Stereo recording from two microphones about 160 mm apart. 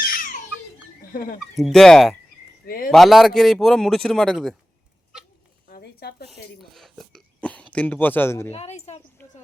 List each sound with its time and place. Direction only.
0.0 s babbling: 60° left (ahead or behind)
1.1 s speech: 60° left (ahead or behind)
1.5 s a man's voice: centre (ahead or behind)
2.6 s speech: 70° left (ahead or behind)
2.9 s a man's voice: centre (ahead or behind)
5.6 s zipper: 70° left (ahead or behind)
6.3 s speech: centre (ahead or behind)
8.5 s speech: 40° left (ahead or behind)
9.2 s a sound: 10° left (ahead or behind)